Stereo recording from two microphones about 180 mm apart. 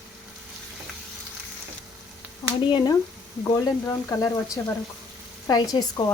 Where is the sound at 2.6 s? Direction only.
25° left (ahead or behind).